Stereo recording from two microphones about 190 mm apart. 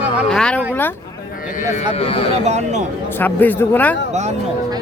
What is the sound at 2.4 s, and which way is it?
Speech, 35° right (ahead or behind).